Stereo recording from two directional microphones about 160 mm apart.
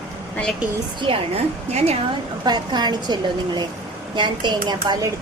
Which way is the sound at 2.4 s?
25° right (ahead or behind).